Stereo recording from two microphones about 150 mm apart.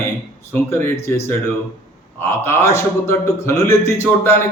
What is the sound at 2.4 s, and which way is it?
Speech, 15° left (ahead or behind).